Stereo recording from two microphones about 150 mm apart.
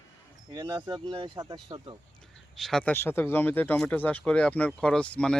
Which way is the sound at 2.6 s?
5° left (ahead or behind).